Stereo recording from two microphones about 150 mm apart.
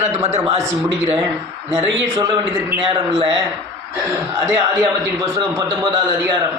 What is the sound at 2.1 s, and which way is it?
A man's voice, 30° right (ahead or behind).